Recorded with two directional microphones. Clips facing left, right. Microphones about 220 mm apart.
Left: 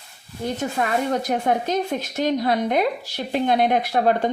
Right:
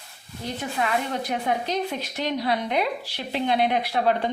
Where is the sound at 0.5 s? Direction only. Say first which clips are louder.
Left 2 dB; 45° left (ahead or behind).